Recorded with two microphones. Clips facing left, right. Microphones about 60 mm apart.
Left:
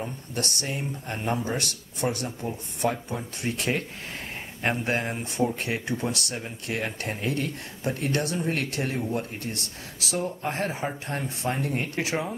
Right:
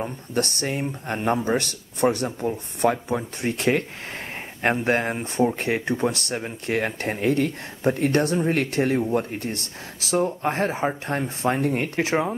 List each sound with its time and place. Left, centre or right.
0.0 s speech: right